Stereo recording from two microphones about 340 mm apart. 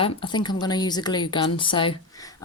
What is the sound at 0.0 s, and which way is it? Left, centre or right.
Speech, centre.